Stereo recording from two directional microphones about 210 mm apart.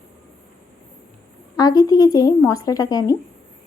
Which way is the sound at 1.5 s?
15° left (ahead or behind).